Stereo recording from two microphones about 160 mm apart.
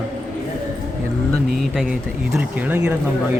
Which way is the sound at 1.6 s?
Centre (ahead or behind).